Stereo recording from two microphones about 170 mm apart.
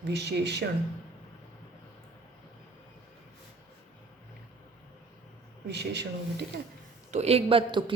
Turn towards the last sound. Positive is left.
turn(degrees=-30)  # may be behind; listen again after turning